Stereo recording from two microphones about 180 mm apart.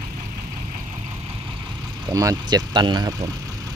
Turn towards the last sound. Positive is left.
turn(degrees=-20)  # may be behind; listen again after turning